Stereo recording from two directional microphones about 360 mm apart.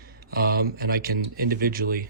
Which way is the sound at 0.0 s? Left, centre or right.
Right.